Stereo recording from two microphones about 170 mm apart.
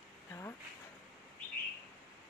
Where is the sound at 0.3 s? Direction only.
15° left (ahead or behind).